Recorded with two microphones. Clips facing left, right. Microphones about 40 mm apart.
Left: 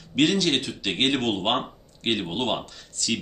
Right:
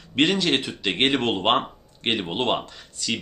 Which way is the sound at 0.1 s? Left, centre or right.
Right.